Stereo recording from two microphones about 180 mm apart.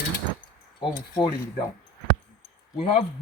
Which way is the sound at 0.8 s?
25° left (ahead or behind).